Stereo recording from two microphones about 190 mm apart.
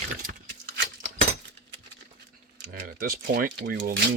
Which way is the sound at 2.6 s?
50° right (ahead or behind).